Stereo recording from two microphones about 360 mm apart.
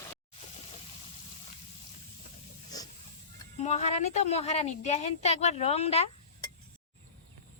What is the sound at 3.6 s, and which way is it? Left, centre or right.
A woman's voice, centre.